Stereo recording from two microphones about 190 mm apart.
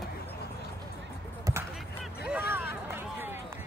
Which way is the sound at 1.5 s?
20° right (ahead or behind).